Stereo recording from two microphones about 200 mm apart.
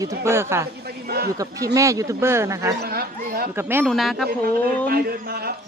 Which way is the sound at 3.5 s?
10° right (ahead or behind).